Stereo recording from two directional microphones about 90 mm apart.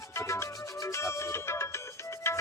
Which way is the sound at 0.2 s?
30° left (ahead or behind).